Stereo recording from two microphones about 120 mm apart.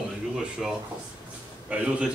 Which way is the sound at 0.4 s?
5° right (ahead or behind).